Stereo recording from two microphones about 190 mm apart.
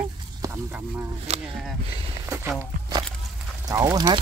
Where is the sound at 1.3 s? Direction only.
35° right (ahead or behind).